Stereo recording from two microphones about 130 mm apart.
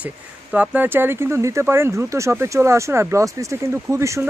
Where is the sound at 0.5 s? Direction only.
15° right (ahead or behind).